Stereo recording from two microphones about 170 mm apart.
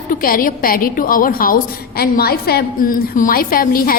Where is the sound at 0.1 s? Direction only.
55° left (ahead or behind).